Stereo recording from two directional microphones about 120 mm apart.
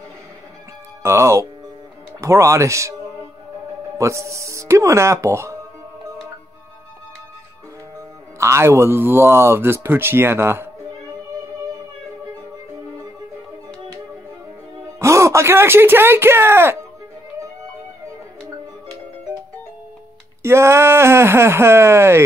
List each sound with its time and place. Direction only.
1.0 s speech: 25° right (ahead or behind)
4.0 s speech: 25° right (ahead or behind)
8.4 s speech: 25° right (ahead or behind)
15.0 s speech: 25° right (ahead or behind)
20.4 s speech: 20° right (ahead or behind)